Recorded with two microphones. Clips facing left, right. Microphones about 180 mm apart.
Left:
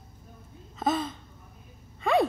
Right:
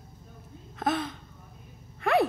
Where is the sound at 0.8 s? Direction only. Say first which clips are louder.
Left 1 dB; centre (ahead or behind).